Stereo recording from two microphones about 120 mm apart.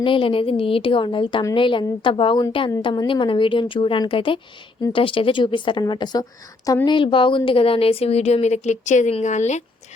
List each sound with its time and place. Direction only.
0.0 s a woman's voice: 45° left (ahead or behind); by 9.6 s 75° left (ahead or behind)